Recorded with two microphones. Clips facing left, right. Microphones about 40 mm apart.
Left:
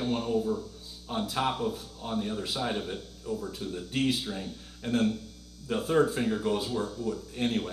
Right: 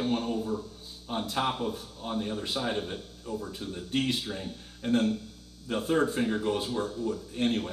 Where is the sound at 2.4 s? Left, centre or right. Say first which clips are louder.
Even; centre.